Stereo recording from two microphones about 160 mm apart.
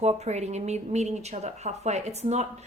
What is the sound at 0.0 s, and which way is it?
Speech, 45° right (ahead or behind).